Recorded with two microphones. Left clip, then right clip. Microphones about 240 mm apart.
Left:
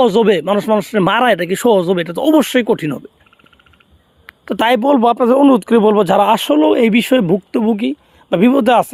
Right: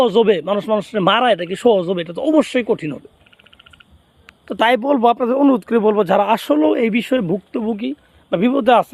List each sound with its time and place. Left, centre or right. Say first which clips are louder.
0.0 s speech: left 2 dB; left
4.4 s speech: left 2 dB; left